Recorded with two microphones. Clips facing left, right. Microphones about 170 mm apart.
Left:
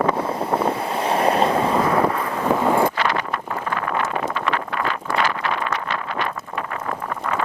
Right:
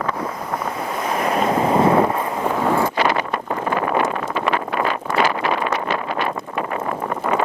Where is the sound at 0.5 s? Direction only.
30° left (ahead or behind).